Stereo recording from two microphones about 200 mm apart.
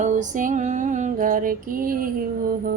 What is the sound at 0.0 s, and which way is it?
Female singing, 40° right (ahead or behind).